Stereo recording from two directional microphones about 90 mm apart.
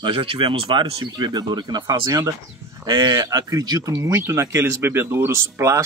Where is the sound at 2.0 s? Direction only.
40° right (ahead or behind).